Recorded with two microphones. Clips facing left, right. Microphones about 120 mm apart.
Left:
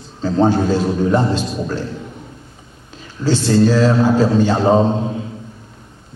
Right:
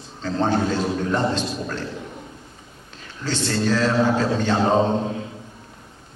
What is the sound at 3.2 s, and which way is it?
A man's voice, 5° left (ahead or behind).